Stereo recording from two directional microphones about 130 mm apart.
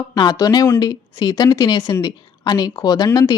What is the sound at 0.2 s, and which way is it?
A woman's voice, 30° left (ahead or behind).